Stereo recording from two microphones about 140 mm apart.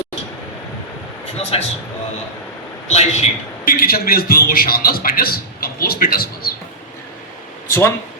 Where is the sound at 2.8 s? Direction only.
50° left (ahead or behind).